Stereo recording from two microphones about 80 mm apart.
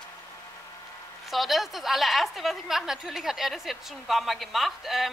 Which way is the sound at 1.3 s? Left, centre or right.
Centre.